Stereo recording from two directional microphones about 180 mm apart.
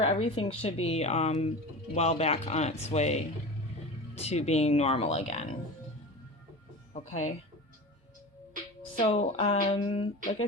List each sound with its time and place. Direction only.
0.0 s speech: 30° left (ahead or behind)
6.9 s speech: 40° left (ahead or behind)
9.0 s speech: 35° left (ahead or behind)